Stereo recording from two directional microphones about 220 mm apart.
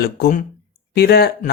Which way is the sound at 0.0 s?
40° left (ahead or behind).